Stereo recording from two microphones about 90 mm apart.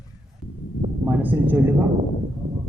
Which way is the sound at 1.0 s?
20° right (ahead or behind).